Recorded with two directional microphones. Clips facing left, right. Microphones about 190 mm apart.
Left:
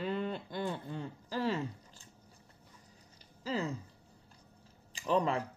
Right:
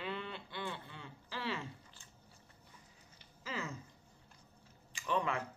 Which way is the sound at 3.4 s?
35° left (ahead or behind).